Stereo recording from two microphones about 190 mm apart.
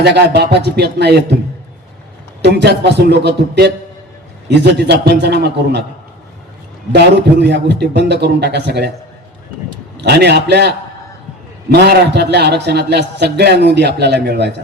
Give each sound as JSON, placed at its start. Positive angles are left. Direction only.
{"t": 0.0, "sound": "a man's voice", "side_deg": -60}
{"t": 2.4, "sound": "a man's voice", "side_deg": -60}
{"t": 6.9, "sound": "a man's voice", "side_deg": -60}
{"t": 10.0, "sound": "a man's voice", "side_deg": -60}